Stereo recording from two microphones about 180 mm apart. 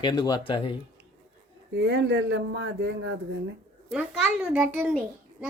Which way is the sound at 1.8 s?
75° right (ahead or behind).